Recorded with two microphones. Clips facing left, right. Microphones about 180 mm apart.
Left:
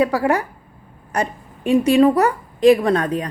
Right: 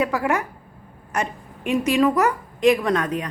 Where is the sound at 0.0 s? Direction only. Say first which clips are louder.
Left 4 dB; 35° left (ahead or behind).